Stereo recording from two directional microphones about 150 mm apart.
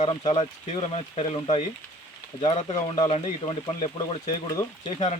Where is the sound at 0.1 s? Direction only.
35° left (ahead or behind).